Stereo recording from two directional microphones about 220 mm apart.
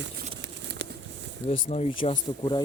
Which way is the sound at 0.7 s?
50° right (ahead or behind).